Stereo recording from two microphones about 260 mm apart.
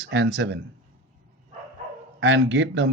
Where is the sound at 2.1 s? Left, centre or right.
Right.